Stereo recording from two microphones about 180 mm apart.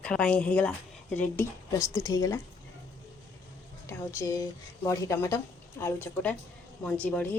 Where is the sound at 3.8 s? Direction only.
15° left (ahead or behind).